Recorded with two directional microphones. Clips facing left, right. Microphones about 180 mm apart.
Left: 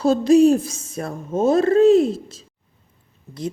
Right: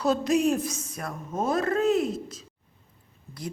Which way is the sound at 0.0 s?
30° left (ahead or behind).